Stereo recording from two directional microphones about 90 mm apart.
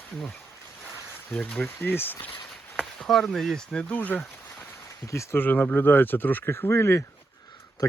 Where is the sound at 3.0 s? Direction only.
5° left (ahead or behind).